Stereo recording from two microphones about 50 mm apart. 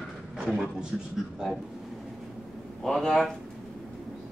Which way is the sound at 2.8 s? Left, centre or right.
Centre.